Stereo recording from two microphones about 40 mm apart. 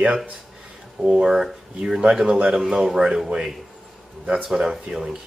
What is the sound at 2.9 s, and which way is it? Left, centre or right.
Speech, centre.